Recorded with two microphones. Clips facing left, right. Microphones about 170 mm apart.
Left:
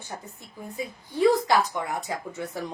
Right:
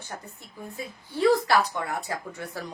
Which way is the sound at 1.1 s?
15° left (ahead or behind).